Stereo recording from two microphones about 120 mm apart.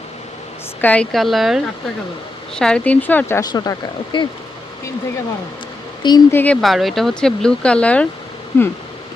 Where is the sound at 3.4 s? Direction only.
30° left (ahead or behind).